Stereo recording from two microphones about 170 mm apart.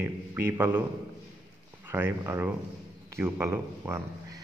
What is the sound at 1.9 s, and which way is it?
Speech, 15° right (ahead or behind).